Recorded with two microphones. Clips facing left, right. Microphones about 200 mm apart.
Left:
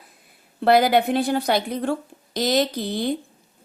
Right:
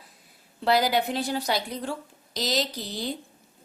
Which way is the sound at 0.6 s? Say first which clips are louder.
Left 6 dB; 55° left (ahead or behind).